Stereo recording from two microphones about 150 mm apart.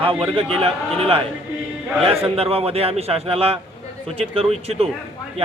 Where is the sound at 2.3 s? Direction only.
40° right (ahead or behind).